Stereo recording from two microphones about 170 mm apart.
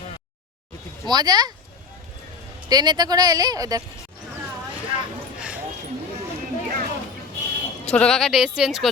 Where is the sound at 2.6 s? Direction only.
25° right (ahead or behind).